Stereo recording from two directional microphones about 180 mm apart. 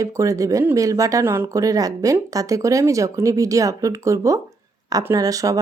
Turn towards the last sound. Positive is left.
turn(degrees=-20)  # may be behind; listen again after turning